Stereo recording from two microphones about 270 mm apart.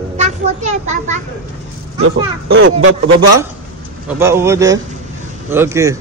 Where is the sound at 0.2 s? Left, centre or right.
Right.